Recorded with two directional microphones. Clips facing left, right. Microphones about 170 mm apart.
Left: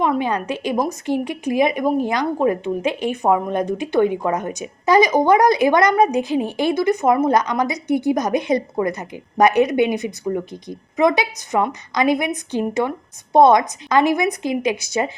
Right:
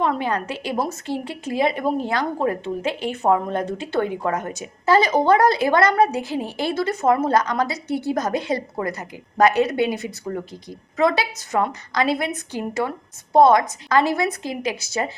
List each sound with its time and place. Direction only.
0.0 s a woman's voice: 15° left (ahead or behind)